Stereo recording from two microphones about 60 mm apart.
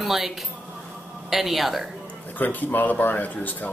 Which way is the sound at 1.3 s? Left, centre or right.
Centre.